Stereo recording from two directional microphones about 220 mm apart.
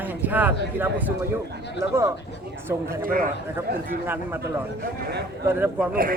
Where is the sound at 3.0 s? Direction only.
40° right (ahead or behind).